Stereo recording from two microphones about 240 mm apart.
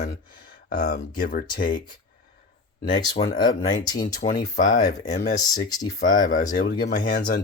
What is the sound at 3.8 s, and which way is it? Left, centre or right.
Speech, centre.